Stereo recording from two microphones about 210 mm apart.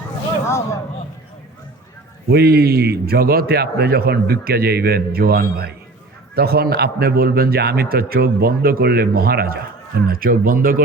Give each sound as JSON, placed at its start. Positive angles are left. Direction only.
{"t": 0.4, "sound": "speech", "side_deg": 15}
{"t": 2.3, "sound": "a man's voice", "side_deg": -45}